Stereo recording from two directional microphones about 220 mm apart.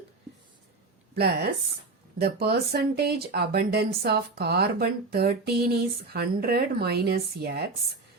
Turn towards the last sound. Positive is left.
turn(degrees=-45)  # may be behind; listen again after turning